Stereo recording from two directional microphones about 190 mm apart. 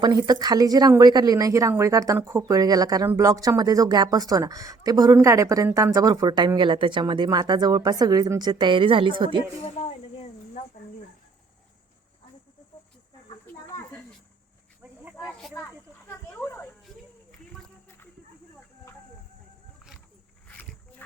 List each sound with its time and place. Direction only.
0.0 s a woman's voice: 20° right (ahead or behind)
9.6 s snake: 30° left (ahead or behind)
15.2 s snake: centre (ahead or behind)
16.3 s a sound: 10° left (ahead or behind)